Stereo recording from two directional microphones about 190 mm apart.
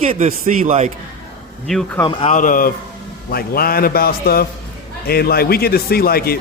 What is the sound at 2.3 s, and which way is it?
A man's voice, 45° left (ahead or behind).